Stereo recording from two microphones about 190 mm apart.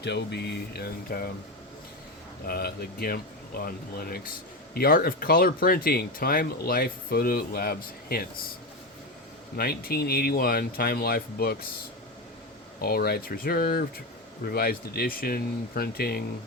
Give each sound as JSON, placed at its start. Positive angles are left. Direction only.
{"t": 0.0, "sound": "speech", "side_deg": 65}
{"t": 2.5, "sound": "speech", "side_deg": 55}
{"t": 9.6, "sound": "speech", "side_deg": 55}
{"t": 12.8, "sound": "speech", "side_deg": 55}